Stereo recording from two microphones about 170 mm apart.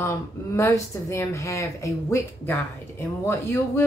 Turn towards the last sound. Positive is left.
turn(degrees=15)  # may be behind; listen again after turning